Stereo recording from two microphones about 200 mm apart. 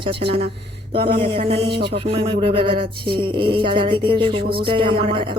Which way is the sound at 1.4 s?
30° right (ahead or behind).